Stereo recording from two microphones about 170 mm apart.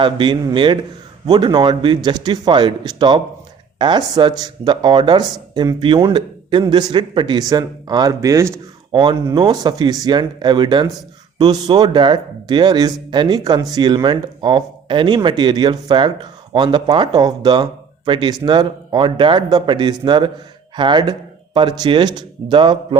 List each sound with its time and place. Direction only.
0.0 s speech: 30° right (ahead or behind)
8.9 s speech: 30° right (ahead or behind)